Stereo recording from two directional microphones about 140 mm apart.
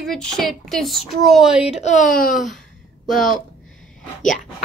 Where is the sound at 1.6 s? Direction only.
50° left (ahead or behind).